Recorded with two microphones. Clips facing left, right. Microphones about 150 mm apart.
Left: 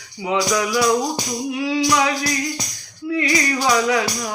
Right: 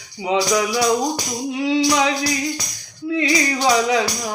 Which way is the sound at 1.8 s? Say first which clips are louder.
Right 1 dB; 20° right (ahead or behind).